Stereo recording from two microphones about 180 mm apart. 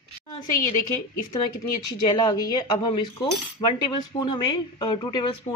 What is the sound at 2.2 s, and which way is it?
Cutlery, 20° left (ahead or behind).